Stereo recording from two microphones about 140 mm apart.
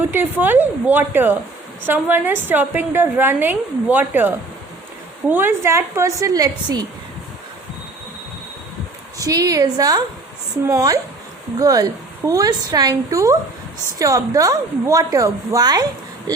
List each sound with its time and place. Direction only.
0.1 s a woman's voice: 15° right (ahead or behind)
9.1 s a woman's voice: 25° right (ahead or behind)